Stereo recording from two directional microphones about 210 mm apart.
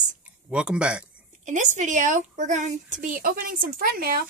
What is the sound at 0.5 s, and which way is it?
Speech, 5° right (ahead or behind).